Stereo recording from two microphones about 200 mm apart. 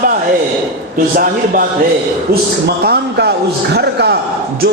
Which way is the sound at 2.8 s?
55° right (ahead or behind).